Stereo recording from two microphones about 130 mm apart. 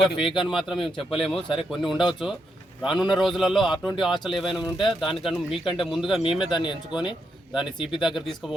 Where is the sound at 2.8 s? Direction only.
5° right (ahead or behind).